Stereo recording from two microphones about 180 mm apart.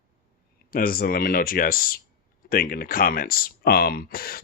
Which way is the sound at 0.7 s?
55° left (ahead or behind).